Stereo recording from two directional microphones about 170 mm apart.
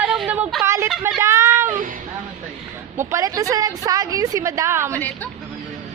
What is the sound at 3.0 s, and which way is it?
A woman's voice, 15° right (ahead or behind).